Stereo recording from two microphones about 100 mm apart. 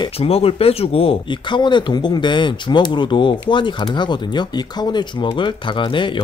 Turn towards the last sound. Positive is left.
turn(degrees=55)  # may be behind; listen again after turning